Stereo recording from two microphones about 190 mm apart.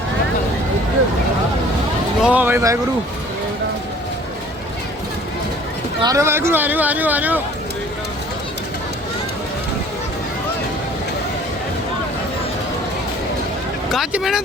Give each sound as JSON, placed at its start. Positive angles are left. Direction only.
{"t": 2.2, "sound": "speech", "side_deg": -10}
{"t": 6.0, "sound": "speech", "side_deg": -15}
{"t": 13.9, "sound": "speech", "side_deg": 0}